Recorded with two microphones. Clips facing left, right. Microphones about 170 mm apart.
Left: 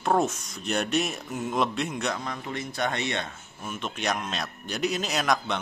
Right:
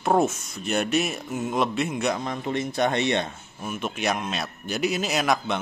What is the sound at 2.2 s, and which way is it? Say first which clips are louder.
Speech: right 6 dB; 20° right (ahead or behind).